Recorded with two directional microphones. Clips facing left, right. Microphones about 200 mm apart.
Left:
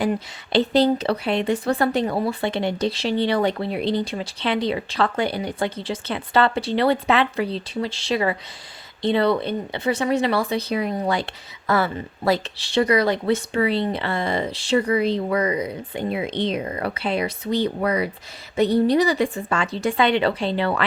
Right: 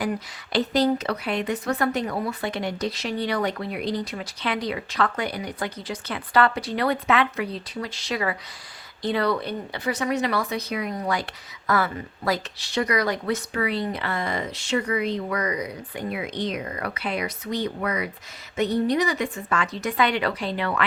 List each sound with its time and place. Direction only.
0.0 s a woman's voice: 25° left (ahead or behind)